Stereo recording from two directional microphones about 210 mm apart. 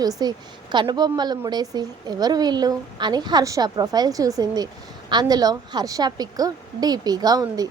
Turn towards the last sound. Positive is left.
turn(degrees=-20)  # may be behind; listen again after turning